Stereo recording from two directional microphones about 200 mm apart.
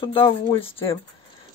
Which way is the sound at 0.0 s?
25° left (ahead or behind).